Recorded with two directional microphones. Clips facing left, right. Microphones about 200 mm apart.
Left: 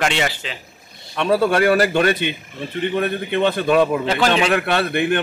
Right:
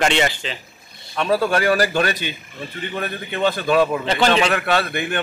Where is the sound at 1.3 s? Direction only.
25° left (ahead or behind).